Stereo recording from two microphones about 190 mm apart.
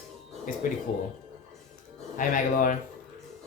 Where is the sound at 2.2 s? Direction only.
45° left (ahead or behind).